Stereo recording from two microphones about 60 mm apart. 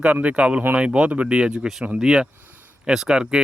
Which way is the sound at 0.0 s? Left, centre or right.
Right.